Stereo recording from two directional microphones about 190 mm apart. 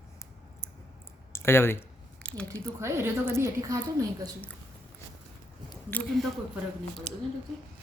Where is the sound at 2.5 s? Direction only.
15° right (ahead or behind).